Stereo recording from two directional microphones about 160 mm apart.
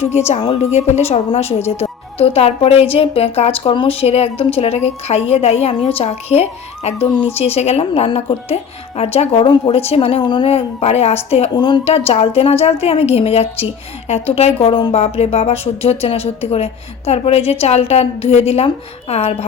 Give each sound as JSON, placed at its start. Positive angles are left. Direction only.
{"t": 0.3, "sound": "a woman's voice", "side_deg": 40}